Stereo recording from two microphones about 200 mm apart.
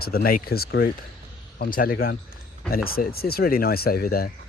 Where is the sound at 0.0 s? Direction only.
50° left (ahead or behind).